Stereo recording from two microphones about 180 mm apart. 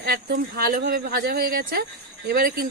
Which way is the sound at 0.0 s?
65° right (ahead or behind).